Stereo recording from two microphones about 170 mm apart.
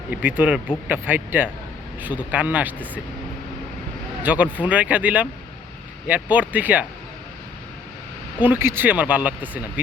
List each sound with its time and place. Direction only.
0.1 s speech: 10° right (ahead or behind)
4.2 s speech: 10° right (ahead or behind)
8.4 s speech: 10° right (ahead or behind)